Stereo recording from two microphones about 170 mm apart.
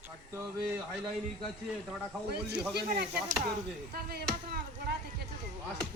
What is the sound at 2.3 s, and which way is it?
Speech, 75° right (ahead or behind).